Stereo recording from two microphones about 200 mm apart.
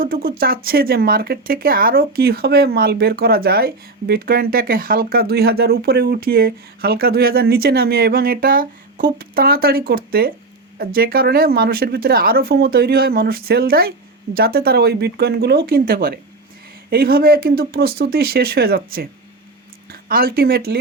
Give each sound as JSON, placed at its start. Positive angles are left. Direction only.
{"t": 0.0, "sound": "speech", "side_deg": -45}